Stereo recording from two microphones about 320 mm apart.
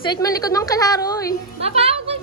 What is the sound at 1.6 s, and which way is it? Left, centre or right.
Music, centre.